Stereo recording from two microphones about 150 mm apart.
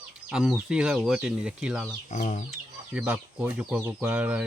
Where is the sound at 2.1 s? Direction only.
55° left (ahead or behind).